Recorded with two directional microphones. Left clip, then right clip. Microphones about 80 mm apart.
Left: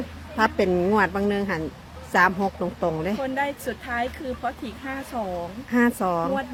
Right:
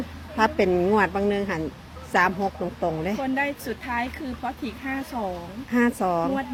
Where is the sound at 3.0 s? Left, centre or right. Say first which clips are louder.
Even; centre.